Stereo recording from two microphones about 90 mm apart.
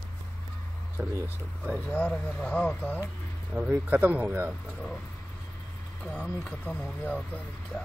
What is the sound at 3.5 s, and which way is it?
Speech, 15° right (ahead or behind).